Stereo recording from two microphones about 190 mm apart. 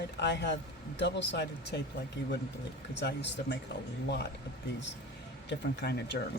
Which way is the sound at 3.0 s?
65° left (ahead or behind).